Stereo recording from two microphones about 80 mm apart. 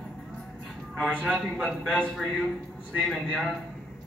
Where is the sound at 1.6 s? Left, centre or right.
Centre.